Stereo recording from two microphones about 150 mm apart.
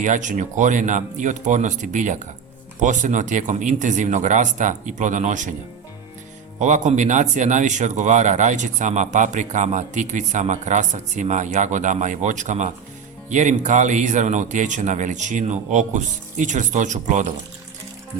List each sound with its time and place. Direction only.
0.0 s speech: 55° right (ahead or behind)
6.6 s speech: 55° right (ahead or behind)